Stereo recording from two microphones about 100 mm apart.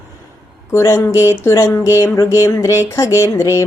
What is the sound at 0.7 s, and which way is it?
Speech, 30° left (ahead or behind).